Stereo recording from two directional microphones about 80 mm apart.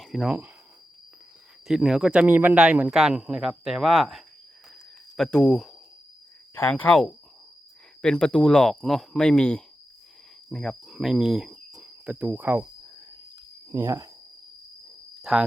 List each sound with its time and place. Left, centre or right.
0.0 s speech: centre
1.6 s speech: centre
6.5 s speech: left
8.0 s speech: centre
10.5 s cricket: centre
12.2 s speech: right
13.7 s speech: right
15.2 s speech: centre